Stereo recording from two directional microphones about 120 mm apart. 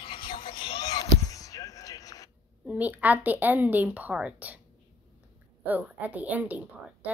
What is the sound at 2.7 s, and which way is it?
A woman's voice, 15° right (ahead or behind).